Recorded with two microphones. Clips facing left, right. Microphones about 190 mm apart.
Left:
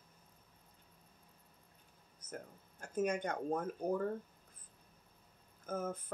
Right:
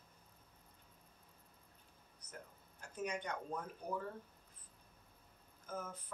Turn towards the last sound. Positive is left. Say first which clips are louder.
# left 7 dB
turn(degrees=50)  # may be behind; listen again after turning